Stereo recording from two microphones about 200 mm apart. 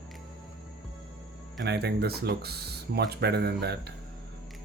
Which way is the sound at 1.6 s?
55° right (ahead or behind).